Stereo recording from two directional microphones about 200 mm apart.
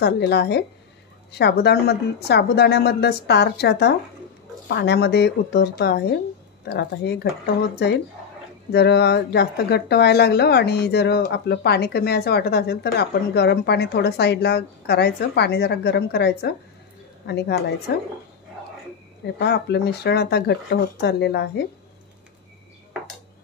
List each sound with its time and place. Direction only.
0.0 s a woman's voice: 55° left (ahead or behind)
19.3 s a woman's voice: 55° left (ahead or behind)